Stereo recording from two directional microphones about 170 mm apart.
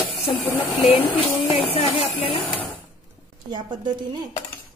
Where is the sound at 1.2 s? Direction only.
35° left (ahead or behind).